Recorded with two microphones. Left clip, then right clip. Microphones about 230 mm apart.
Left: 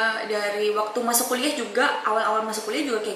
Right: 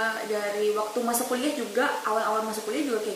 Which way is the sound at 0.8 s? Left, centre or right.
Right.